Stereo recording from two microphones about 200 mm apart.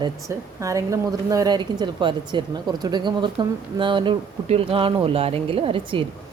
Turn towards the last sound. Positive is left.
turn(degrees=-25)  # may be behind; listen again after turning